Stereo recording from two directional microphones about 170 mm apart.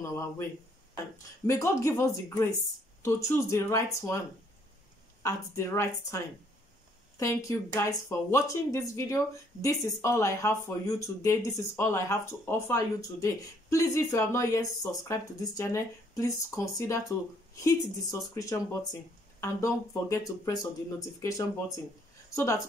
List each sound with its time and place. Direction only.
1.5 s speech: 15° left (ahead or behind)
5.2 s speech: 15° left (ahead or behind)